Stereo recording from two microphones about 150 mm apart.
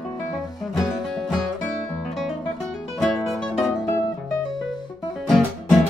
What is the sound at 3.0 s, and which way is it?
Music, centre (ahead or behind).